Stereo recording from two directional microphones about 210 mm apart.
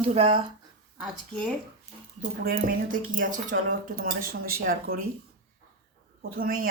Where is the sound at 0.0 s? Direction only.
25° right (ahead or behind).